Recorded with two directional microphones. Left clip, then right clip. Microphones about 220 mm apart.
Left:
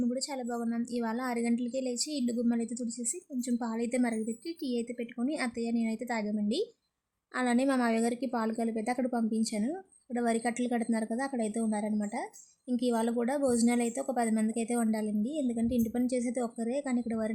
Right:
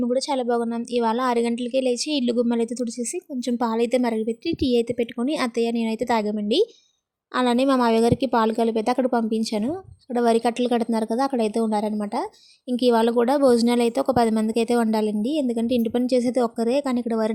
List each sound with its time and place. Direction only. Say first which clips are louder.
0.0 s speech: right 12 dB; 30° right (ahead or behind)